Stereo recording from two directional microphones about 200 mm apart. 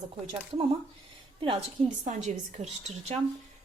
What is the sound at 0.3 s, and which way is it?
Speech, 30° right (ahead or behind).